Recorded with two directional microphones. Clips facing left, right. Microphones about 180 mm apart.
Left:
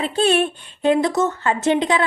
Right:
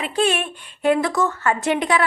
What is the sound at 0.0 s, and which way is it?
A woman's voice, 30° left (ahead or behind).